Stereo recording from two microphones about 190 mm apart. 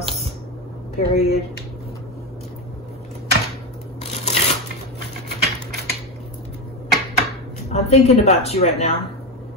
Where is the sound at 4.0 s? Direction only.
35° left (ahead or behind).